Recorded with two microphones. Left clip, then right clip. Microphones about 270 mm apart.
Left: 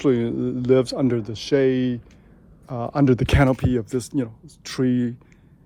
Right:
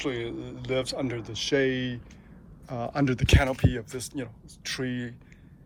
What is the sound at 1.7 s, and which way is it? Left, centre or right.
Speech, left.